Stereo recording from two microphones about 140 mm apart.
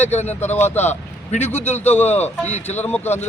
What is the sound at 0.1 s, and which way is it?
Speech, 55° left (ahead or behind).